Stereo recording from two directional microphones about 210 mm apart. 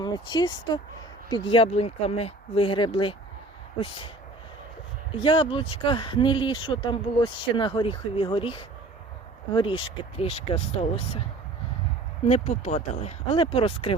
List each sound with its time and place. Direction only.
0.0 s speech: 20° left (ahead or behind)
5.1 s speech: 25° left (ahead or behind)
12.2 s speech: 30° left (ahead or behind)